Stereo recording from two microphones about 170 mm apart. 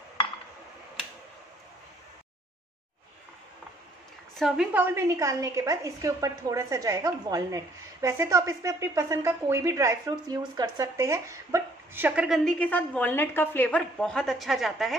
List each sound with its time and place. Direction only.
4.4 s a woman's voice: 5° right (ahead or behind)